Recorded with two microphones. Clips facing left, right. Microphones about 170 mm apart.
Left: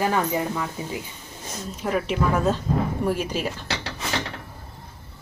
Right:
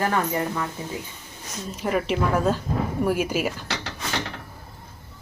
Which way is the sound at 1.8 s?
5° right (ahead or behind).